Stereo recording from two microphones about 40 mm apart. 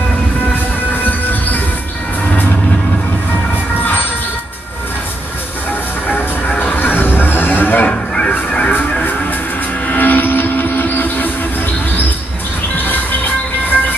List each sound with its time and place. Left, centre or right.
0.9 s train: left
2.2 s vehicle: left
6.0 s music: left
8.5 s music: left
9.8 s vehicle: left
12.7 s train: left